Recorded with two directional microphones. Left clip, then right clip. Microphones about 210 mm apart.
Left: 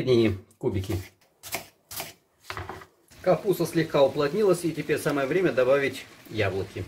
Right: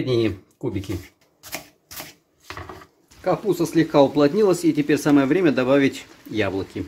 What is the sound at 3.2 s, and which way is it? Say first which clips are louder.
Speech: right 2 dB; 30° right (ahead or behind).